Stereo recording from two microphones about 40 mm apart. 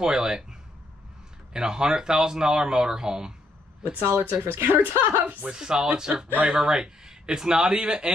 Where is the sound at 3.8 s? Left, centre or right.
Right.